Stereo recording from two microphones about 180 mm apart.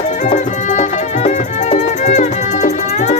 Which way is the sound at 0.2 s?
45° left (ahead or behind).